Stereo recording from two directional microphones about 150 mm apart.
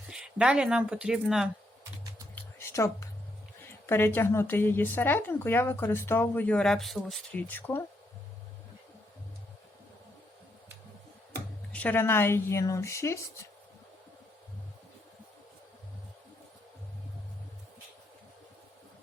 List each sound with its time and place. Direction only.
0.1 s speech: 5° right (ahead or behind)
2.3 s a sound: 15° left (ahead or behind)
3.8 s speech: 15° left (ahead or behind)
11.7 s speech: 10° left (ahead or behind)